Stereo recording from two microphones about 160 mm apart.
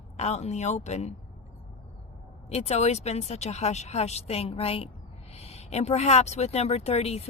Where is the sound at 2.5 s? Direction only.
40° left (ahead or behind).